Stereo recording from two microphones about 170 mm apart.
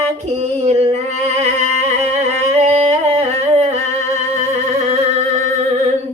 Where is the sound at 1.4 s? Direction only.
40° right (ahead or behind).